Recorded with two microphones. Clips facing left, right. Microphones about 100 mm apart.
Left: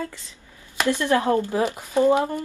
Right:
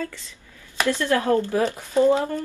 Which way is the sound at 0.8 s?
20° left (ahead or behind).